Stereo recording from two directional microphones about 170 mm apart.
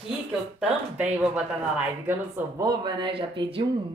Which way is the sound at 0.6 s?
5° right (ahead or behind).